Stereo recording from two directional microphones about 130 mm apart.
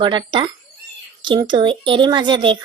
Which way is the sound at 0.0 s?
35° right (ahead or behind).